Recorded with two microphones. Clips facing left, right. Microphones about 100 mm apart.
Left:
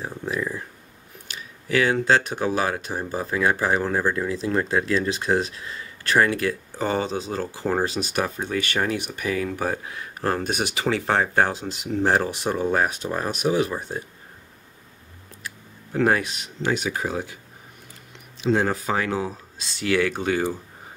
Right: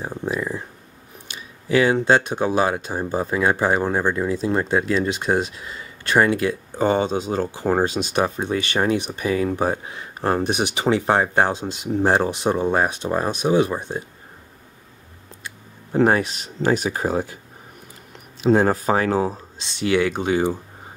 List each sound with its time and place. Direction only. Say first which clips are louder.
0.0 s speech: right 2 dB; 25° right (ahead or behind)
1.7 s speech: right 3 dB; 20° right (ahead or behind)
15.4 s a sound: even; 30° right (ahead or behind)
16.7 s speech: right 4 dB; 40° right (ahead or behind)
18.4 s speech: right 5 dB; 45° right (ahead or behind)
19.6 s speech: right 3 dB; 25° right (ahead or behind)